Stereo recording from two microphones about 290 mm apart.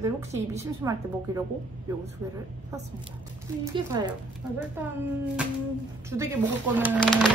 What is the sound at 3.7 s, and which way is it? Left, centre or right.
Speech, centre.